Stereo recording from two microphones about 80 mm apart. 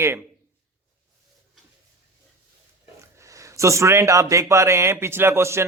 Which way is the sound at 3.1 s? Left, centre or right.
Right.